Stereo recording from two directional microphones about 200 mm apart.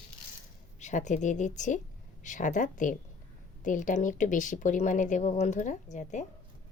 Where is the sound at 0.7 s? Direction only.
35° left (ahead or behind).